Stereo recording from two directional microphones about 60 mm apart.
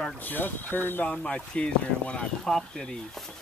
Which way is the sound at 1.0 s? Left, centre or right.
Centre.